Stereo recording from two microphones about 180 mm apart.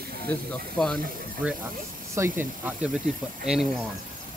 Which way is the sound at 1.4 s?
10° right (ahead or behind).